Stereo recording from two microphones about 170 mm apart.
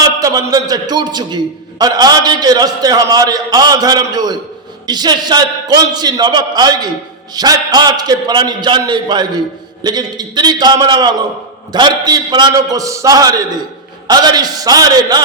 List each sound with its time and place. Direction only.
0.2 s a man's voice: 20° right (ahead or behind)